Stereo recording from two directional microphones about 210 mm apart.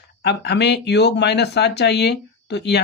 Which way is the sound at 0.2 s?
50° left (ahead or behind).